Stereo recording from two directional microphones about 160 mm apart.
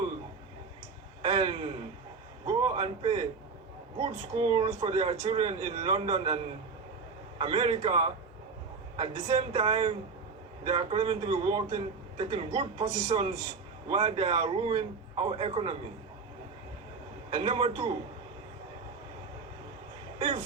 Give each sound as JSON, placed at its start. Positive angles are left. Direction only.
{"t": 1.2, "sound": "a sound", "side_deg": -35}
{"t": 4.0, "sound": "a man's voice", "side_deg": -35}
{"t": 17.3, "sound": "a man's voice", "side_deg": -35}
{"t": 20.1, "sound": "speech", "side_deg": -40}